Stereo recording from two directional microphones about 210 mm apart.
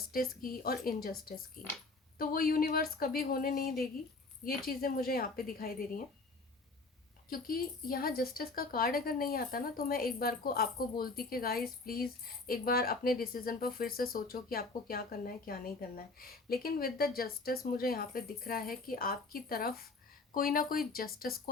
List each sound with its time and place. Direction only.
0.1 s speech: 45° left (ahead or behind)
2.1 s speech: 45° left (ahead or behind)
7.3 s speech: 45° left (ahead or behind)